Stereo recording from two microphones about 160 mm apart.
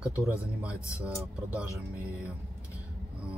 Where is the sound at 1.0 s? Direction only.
10° right (ahead or behind).